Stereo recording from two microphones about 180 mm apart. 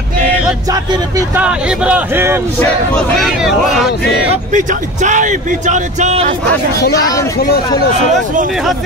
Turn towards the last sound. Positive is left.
turn(degrees=20)  # may be behind; listen again after turning